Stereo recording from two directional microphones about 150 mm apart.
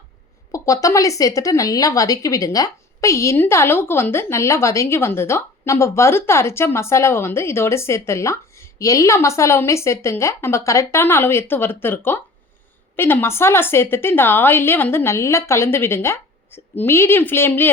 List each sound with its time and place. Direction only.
0.5 s speech: 20° left (ahead or behind)